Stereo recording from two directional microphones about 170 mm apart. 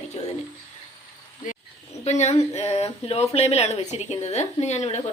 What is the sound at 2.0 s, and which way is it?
Speech, 40° left (ahead or behind).